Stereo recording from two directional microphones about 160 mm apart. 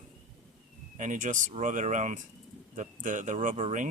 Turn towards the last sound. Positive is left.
turn(degrees=-50)  # may be behind; listen again after turning